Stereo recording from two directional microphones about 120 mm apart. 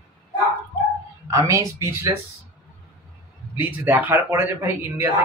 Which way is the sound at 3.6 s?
15° right (ahead or behind).